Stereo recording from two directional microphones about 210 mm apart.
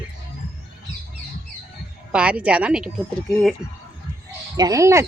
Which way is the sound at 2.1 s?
5° right (ahead or behind).